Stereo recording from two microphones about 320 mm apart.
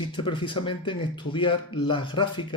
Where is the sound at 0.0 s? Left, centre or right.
Centre.